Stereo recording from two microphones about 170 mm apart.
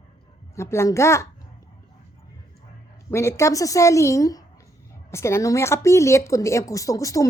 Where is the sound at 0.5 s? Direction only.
15° left (ahead or behind).